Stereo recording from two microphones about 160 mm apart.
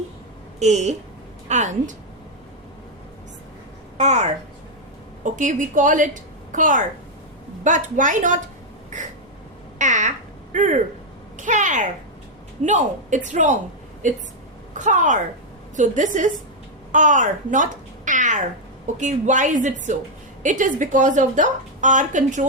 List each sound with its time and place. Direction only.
0.6 s a woman's voice: 45° right (ahead or behind)
3.9 s a woman's voice: 45° right (ahead or behind)
9.7 s a sound: 50° right (ahead or behind)
11.3 s a child's voice: 50° right (ahead or behind)
14.8 s a woman's voice: 50° right (ahead or behind)